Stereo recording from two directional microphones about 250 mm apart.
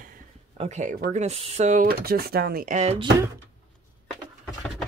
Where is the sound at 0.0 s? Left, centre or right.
Right.